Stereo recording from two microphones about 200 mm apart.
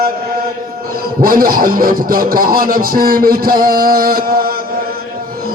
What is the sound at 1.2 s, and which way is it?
Speech, 45° right (ahead or behind).